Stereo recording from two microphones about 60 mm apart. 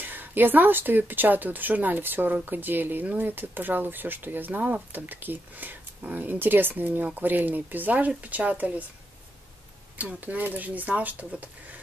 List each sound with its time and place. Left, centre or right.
0.0 s speech: right
9.9 s speech: right